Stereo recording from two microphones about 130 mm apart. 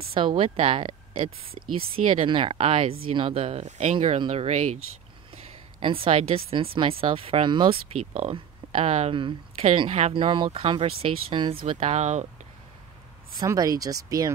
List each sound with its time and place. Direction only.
0.0 s speech: 45° right (ahead or behind)
3.6 s speech: 65° right (ahead or behind)
5.3 s a woman's voice: 45° right (ahead or behind)
9.1 s speech: 40° right (ahead or behind)
9.8 s speech: 60° right (ahead or behind)
10.1 s speech: 40° right (ahead or behind); by 12.3 s 60° right (ahead or behind)
13.4 s speech: 30° right (ahead or behind)